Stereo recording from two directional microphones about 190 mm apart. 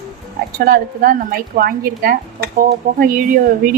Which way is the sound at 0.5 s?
50° right (ahead or behind).